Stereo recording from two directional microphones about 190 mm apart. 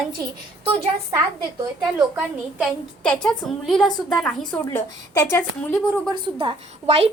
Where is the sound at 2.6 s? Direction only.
5° left (ahead or behind).